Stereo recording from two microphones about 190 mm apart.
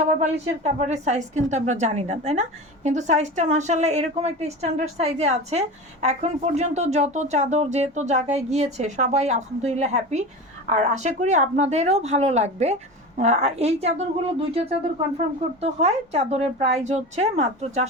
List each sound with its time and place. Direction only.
0.0 s speech: 35° right (ahead or behind)